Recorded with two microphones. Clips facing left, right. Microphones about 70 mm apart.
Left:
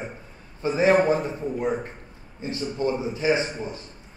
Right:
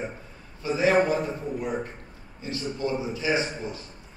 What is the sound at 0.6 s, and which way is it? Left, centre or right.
A man's voice, left.